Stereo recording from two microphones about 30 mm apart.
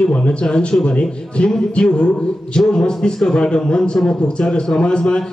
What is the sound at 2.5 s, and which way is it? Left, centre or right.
A man's voice, left.